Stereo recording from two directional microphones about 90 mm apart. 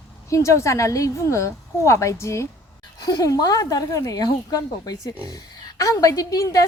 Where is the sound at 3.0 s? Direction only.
45° left (ahead or behind).